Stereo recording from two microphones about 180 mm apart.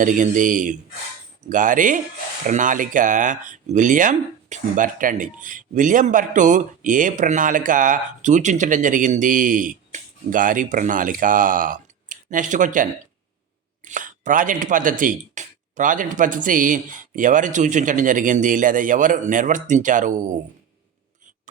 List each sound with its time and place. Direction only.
0.0 s speech: 45° right (ahead or behind)